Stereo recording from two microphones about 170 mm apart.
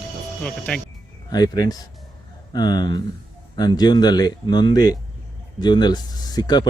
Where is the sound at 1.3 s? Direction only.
25° left (ahead or behind).